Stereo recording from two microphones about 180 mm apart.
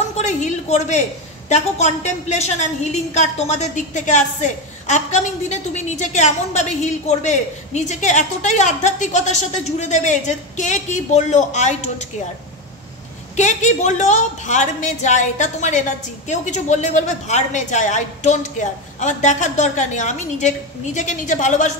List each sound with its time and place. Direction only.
0.2 s a woman's voice: 40° left (ahead or behind)
13.4 s a woman's voice: 40° left (ahead or behind)